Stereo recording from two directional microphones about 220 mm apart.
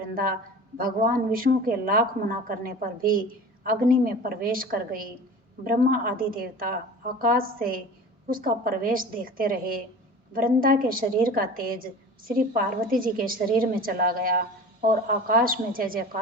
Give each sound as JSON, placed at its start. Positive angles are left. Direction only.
{"t": 0.1, "sound": "a woman's voice", "side_deg": -40}